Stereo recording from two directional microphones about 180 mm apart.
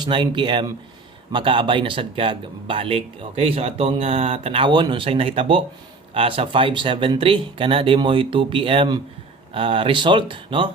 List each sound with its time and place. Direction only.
0.0 s speech: 25° right (ahead or behind)